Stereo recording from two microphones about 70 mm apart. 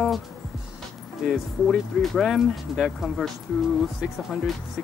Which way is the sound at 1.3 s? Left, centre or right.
Centre.